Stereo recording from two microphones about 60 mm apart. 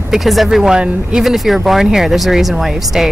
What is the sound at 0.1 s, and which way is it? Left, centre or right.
Speech, centre.